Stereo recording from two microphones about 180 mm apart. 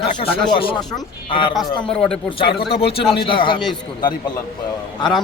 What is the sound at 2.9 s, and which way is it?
Speech, 30° left (ahead or behind).